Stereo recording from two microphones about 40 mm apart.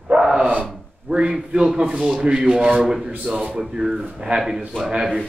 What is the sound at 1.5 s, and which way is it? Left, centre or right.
Speech, right.